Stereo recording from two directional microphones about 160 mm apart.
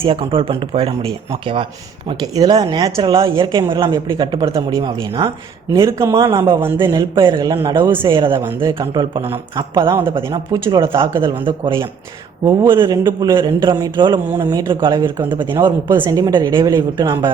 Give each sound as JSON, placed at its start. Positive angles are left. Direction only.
{"t": 0.0, "sound": "speech", "side_deg": -35}
{"t": 7.8, "sound": "speech", "side_deg": -15}
{"t": 8.1, "sound": "speech", "side_deg": -30}
{"t": 8.4, "sound": "speech", "side_deg": -20}
{"t": 11.2, "sound": "speech", "side_deg": -30}
{"t": 12.5, "sound": "speech", "side_deg": -15}
{"t": 13.1, "sound": "speech", "side_deg": -25}
{"t": 14.3, "sound": "speech", "side_deg": -20}
{"t": 14.7, "sound": "speech", "side_deg": -30}
{"t": 15.0, "sound": "speech", "side_deg": -10}